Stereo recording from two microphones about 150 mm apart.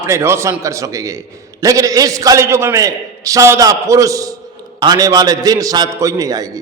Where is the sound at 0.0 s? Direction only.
15° right (ahead or behind).